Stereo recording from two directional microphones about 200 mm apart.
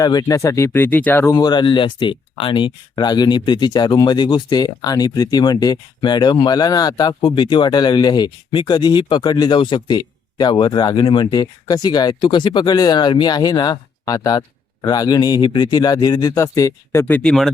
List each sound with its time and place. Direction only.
0.0 s speech: 20° left (ahead or behind); by 17.5 s centre (ahead or behind)